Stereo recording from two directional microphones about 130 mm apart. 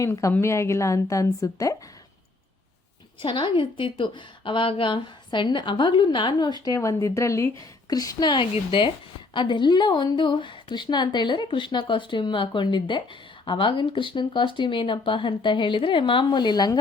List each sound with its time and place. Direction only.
0.0 s a woman's voice: 25° left (ahead or behind)
3.2 s a woman's voice: 40° left (ahead or behind)
6.7 s a woman's voice: 20° left (ahead or behind)